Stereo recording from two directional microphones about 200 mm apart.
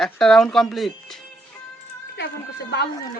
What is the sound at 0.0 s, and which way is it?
Speech, centre (ahead or behind).